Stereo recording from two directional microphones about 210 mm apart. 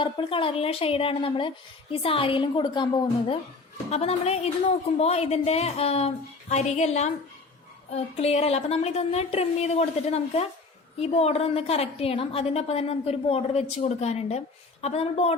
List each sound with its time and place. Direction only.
0.0 s a woman's voice: 25° left (ahead or behind)